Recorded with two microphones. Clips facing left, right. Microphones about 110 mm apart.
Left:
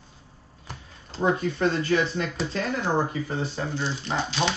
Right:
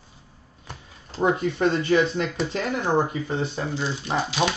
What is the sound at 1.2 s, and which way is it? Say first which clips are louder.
Speech: right 2 dB; 15° right (ahead or behind).